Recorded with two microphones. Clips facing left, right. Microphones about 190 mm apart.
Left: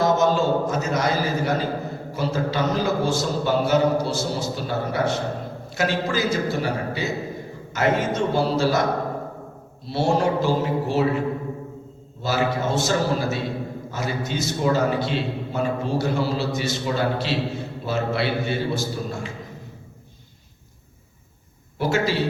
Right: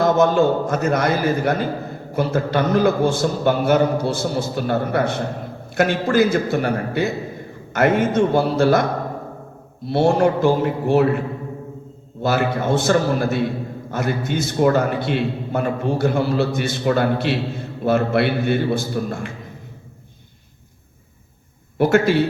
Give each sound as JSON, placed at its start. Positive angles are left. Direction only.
{"t": 0.0, "sound": "a man's voice", "side_deg": -55}
{"t": 9.8, "sound": "a man's voice", "side_deg": -55}
{"t": 12.2, "sound": "a man's voice", "side_deg": -55}
{"t": 21.8, "sound": "a man's voice", "side_deg": -55}